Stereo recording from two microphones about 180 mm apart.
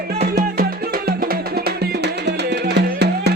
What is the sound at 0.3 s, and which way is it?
Music, 60° right (ahead or behind).